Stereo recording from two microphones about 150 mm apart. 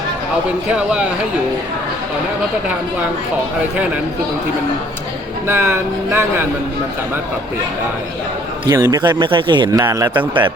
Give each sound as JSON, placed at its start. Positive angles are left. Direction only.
{"t": 0.7, "sound": "speech", "side_deg": -5}
{"t": 5.5, "sound": "speech", "side_deg": -15}
{"t": 8.7, "sound": "speech", "side_deg": -25}
{"t": 10.2, "sound": "speech", "side_deg": -35}